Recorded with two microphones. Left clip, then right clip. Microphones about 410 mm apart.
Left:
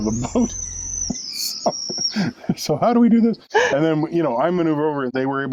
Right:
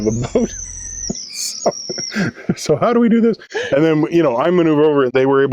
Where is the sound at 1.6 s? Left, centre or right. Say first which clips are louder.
Right 3 dB; right.